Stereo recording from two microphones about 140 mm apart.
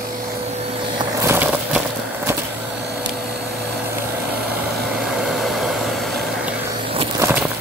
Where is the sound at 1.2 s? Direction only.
15° right (ahead or behind).